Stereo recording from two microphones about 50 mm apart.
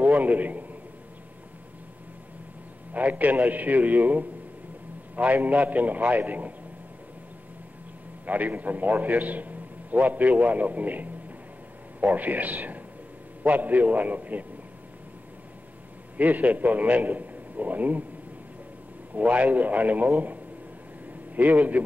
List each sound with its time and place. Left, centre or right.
0.0 s a man's voice: right
2.9 s a man's voice: right
8.3 s a man's voice: right
16.2 s a man's voice: right
19.1 s a man's voice: right
21.4 s a man's voice: right